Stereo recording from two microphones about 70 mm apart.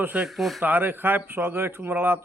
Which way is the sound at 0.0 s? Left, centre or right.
Right.